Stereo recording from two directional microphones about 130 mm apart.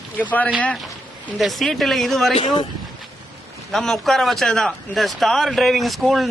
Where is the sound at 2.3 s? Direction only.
40° left (ahead or behind).